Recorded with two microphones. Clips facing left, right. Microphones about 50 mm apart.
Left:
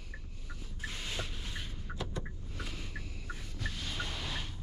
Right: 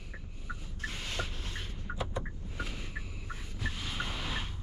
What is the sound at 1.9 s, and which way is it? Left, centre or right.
Vehicle, centre.